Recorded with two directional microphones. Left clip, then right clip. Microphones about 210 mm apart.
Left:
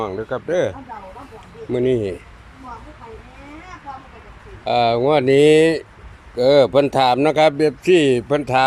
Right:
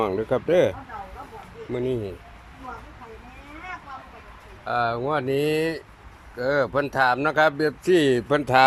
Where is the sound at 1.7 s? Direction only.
15° left (ahead or behind).